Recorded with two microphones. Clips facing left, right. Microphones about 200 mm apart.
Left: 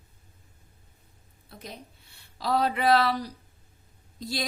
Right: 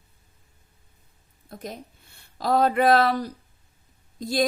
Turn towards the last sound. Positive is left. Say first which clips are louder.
# right 8 dB
turn(degrees=-50)  # may be behind; listen again after turning